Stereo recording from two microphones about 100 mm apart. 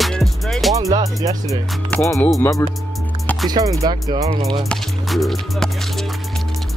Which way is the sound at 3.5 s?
35° right (ahead or behind).